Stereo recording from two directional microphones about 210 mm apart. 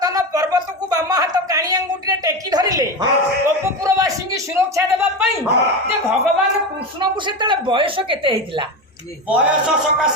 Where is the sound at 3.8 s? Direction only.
15° right (ahead or behind).